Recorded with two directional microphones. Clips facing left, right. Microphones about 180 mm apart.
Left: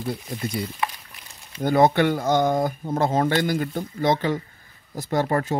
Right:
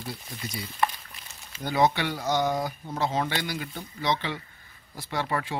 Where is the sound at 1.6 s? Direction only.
50° left (ahead or behind).